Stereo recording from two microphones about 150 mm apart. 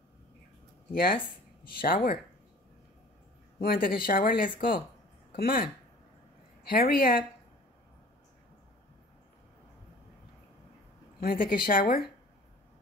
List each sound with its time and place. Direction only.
0.9 s a woman's voice: 75° left (ahead or behind)
3.6 s a woman's voice: 75° left (ahead or behind)
4.6 s speech: 80° left
11.1 s a woman's voice: 75° left (ahead or behind)